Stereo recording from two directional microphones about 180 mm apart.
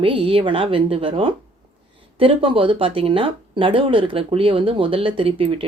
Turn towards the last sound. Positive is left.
turn(degrees=-30)  # may be behind; listen again after turning